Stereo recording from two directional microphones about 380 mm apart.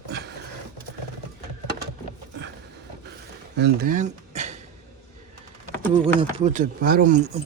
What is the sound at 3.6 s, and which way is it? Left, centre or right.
Speech, centre.